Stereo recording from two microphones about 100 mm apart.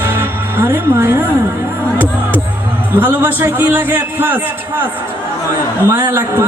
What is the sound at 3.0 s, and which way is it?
Speech, 20° right (ahead or behind).